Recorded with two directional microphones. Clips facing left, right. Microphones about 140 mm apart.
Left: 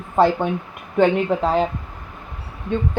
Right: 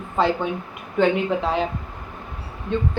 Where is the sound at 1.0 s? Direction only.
40° left (ahead or behind).